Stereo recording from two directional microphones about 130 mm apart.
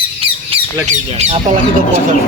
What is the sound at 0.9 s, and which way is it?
Speech, 55° right (ahead or behind).